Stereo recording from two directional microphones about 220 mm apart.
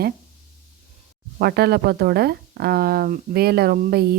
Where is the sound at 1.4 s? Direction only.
45° right (ahead or behind).